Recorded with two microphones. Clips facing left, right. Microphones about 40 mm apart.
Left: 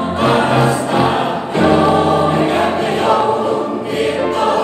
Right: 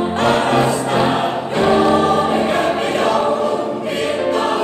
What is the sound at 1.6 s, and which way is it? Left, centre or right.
Choir, centre.